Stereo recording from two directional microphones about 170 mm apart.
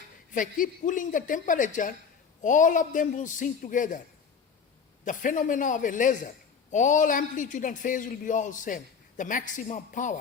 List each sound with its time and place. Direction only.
0.3 s a man's voice: 50° left (ahead or behind)
5.0 s a man's voice: 50° left (ahead or behind)